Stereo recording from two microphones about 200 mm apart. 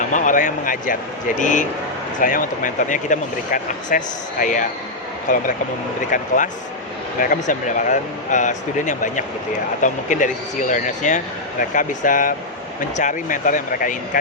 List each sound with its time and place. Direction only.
0.1 s speech: 40° left (ahead or behind)